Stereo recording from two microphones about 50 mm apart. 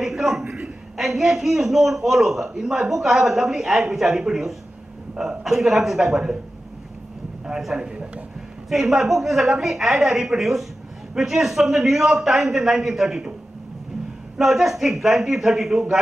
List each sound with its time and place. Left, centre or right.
0.0 s a sound: centre
0.9 s a man's voice: centre
7.4 s a man's voice: centre
8.6 s a woman's voice: centre
14.4 s a man's voice: centre